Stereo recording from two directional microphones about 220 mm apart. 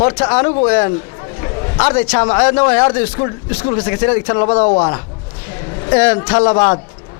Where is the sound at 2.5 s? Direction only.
25° left (ahead or behind).